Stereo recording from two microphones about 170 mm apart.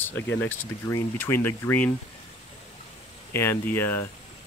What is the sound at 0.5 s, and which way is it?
Speech, 15° left (ahead or behind).